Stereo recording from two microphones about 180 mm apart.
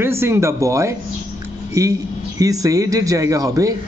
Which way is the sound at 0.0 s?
15° right (ahead or behind).